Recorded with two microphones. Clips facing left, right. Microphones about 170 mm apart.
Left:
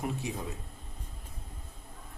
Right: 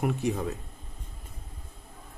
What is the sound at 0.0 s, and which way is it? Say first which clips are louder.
Speech: right 7 dB; 65° right (ahead or behind).